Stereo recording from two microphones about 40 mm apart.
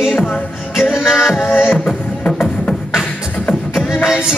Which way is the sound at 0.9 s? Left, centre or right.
Centre.